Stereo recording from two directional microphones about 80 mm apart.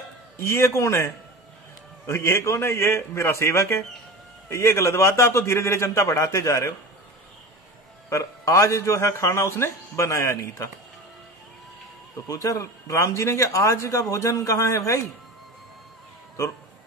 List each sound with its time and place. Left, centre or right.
0.4 s speech: left
8.1 s speech: left
12.3 s speech: left